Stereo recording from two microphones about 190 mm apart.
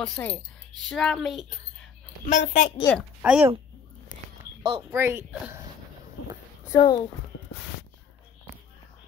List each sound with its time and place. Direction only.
0.0 s speech: 5° left (ahead or behind)
2.2 s a woman's voice: 40° left (ahead or behind)
2.8 s a woman's voice: 10° left (ahead or behind)
3.2 s speech: 5° right (ahead or behind)
4.9 s speech: 10° right (ahead or behind)
6.7 s a child's voice: 20° left (ahead or behind)